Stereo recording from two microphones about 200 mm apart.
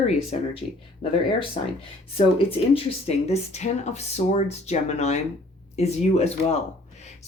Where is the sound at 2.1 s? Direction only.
30° left (ahead or behind).